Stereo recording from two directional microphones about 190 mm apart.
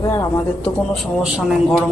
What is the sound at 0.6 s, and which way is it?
Speech, centre (ahead or behind).